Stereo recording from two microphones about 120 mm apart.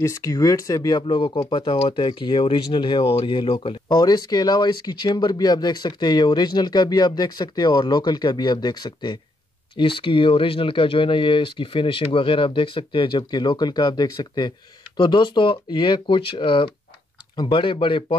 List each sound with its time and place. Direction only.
0.0 s speech: 25° left (ahead or behind); by 2.0 s 50° left (ahead or behind)
2.0 s speech: 40° left (ahead or behind)